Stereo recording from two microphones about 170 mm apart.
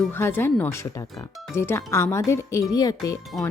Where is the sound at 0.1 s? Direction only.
15° left (ahead or behind).